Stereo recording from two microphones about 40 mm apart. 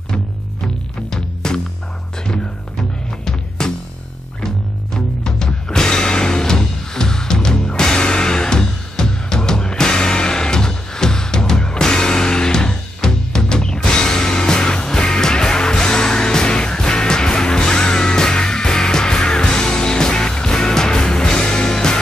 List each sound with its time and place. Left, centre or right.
1.1 s music: centre
4.9 s music: centre